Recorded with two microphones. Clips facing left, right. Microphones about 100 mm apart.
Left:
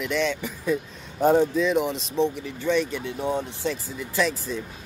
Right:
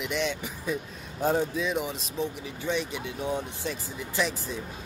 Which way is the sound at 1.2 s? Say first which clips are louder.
Left 7 dB; 65° left (ahead or behind).